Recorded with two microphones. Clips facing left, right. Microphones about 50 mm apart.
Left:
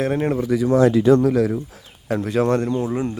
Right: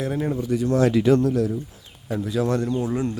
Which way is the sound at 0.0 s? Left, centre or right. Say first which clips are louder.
Left 5 dB; left.